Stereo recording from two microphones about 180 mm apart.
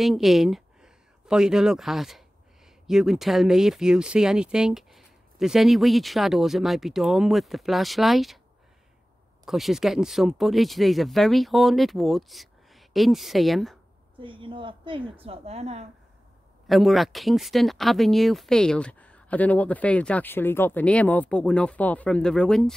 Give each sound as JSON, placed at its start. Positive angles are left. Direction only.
{"t": 0.0, "sound": "speech", "side_deg": 0}
{"t": 9.4, "sound": "speech", "side_deg": 0}
{"t": 14.2, "sound": "a woman's voice", "side_deg": -30}
{"t": 16.6, "sound": "speech", "side_deg": 0}